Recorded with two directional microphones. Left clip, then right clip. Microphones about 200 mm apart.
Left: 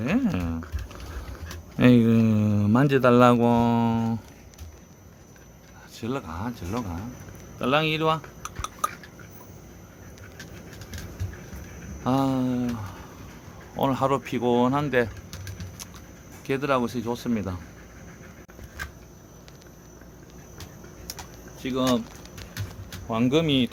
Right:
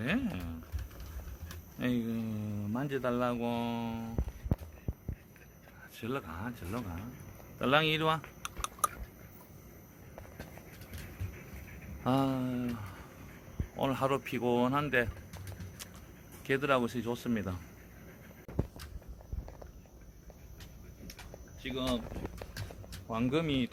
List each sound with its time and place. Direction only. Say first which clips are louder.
0.3 s a sound: left 12 dB; 45° left (ahead or behind)
1.8 s speech: left 16 dB; 55° left (ahead or behind)
6.0 s speech: left 7 dB; 10° left (ahead or behind)
7.6 s typing: left 5 dB; 5° right (ahead or behind)
12.0 s speech: left 7 dB; 5° left (ahead or behind)
12.4 s speech: left 9 dB; 15° left (ahead or behind)
16.5 s speech: left 5 dB; 5° left (ahead or behind)
21.6 s speech: left 11 dB; 25° left (ahead or behind)
23.0 s speech: left 10 dB; 5° left (ahead or behind)